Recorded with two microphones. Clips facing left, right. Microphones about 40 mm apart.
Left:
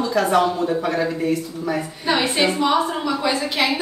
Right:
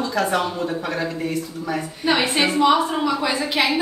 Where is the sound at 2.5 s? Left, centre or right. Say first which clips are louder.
Right 2 dB; centre.